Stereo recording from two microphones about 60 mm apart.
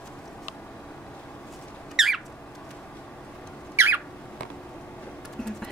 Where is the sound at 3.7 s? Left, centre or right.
Right.